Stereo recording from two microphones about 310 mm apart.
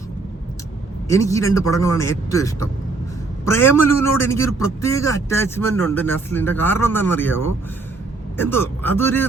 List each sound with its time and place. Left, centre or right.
1.0 s a man's voice: centre
8.4 s a man's voice: centre